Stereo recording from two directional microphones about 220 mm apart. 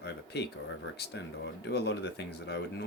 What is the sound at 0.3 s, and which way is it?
Speech, 50° left (ahead or behind).